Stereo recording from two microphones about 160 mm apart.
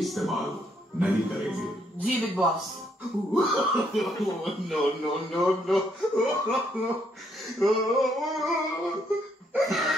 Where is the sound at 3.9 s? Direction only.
Centre (ahead or behind).